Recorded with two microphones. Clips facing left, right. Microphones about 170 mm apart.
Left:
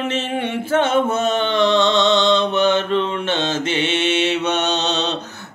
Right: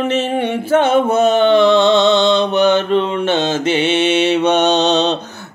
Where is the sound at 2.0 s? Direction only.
5° right (ahead or behind).